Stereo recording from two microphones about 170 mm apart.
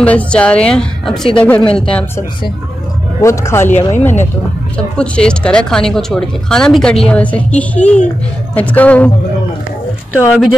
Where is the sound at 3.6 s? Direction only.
45° left (ahead or behind).